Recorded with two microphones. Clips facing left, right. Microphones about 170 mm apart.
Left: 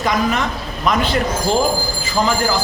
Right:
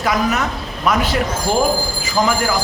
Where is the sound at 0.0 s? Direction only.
5° right (ahead or behind).